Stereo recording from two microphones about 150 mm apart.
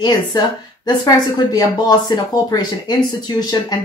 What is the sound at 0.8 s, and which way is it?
Speech, 25° left (ahead or behind).